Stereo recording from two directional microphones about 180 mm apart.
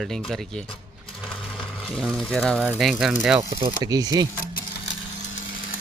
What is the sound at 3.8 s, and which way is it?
Speech, 20° right (ahead or behind).